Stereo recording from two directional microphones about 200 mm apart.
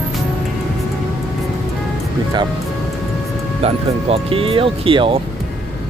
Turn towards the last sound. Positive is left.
turn(degrees=-25)  # may be behind; listen again after turning